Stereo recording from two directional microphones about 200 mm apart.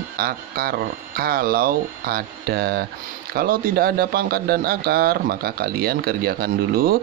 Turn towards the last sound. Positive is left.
turn(degrees=-50)  # may be behind; listen again after turning